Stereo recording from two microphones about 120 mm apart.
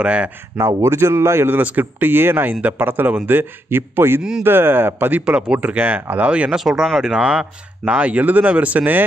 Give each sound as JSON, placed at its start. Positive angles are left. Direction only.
{"t": 0.0, "sound": "speech", "side_deg": -10}
{"t": 0.6, "sound": "a man's voice", "side_deg": -20}